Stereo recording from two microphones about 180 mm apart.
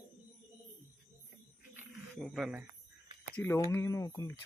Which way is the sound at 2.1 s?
Centre (ahead or behind).